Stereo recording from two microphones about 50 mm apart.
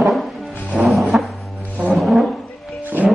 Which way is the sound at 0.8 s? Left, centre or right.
Centre.